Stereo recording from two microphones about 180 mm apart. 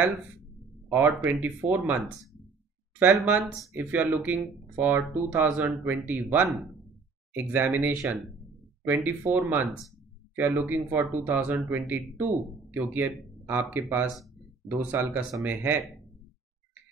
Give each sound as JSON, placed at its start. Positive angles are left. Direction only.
{"t": 0.9, "sound": "speech", "side_deg": -10}